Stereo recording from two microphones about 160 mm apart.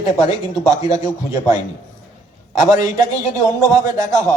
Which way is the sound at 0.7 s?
20° right (ahead or behind).